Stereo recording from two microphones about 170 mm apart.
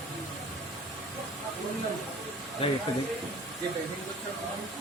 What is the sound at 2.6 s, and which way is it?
Speech, 35° left (ahead or behind).